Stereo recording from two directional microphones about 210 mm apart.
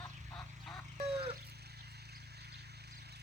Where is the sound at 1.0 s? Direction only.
50° right (ahead or behind).